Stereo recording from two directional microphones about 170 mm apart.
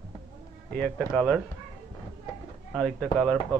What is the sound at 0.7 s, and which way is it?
Speech, 5° left (ahead or behind).